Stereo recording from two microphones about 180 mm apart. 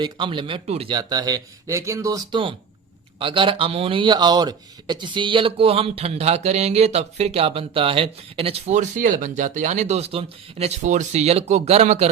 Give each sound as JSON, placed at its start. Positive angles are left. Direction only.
{"t": 0.0, "sound": "a man's voice", "side_deg": -25}